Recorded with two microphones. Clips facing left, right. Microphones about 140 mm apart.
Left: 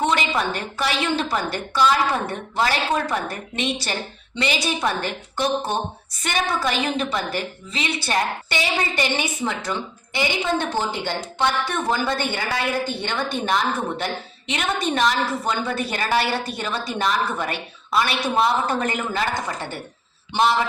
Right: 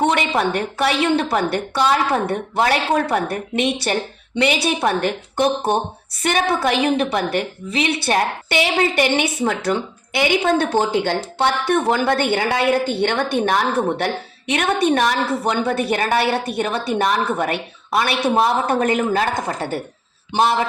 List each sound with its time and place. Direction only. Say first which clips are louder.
0.0 s a woman's voice: right 4 dB; 55° right (ahead or behind)